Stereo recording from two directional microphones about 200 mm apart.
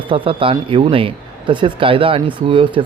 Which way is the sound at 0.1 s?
25° right (ahead or behind).